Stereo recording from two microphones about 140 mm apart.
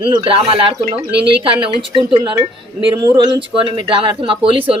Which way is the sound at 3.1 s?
35° right (ahead or behind).